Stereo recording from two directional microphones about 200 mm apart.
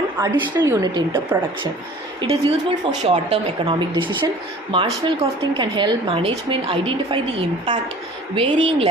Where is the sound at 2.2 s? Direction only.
30° right (ahead or behind).